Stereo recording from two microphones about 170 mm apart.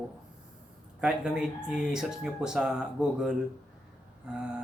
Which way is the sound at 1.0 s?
5° right (ahead or behind).